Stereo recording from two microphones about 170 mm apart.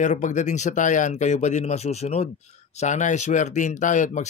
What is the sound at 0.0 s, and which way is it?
Speech, 45° left (ahead or behind).